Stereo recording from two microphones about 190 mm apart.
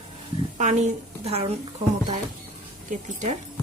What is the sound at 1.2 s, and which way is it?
Speech, 30° right (ahead or behind).